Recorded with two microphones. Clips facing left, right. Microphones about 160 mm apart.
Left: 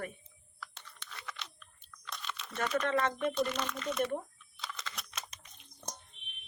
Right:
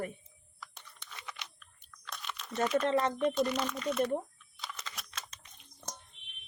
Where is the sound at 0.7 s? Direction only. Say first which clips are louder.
Left 1 dB; 15° right (ahead or behind).